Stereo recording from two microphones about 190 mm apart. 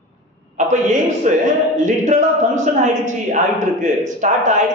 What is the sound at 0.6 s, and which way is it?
A man's voice, 40° right (ahead or behind).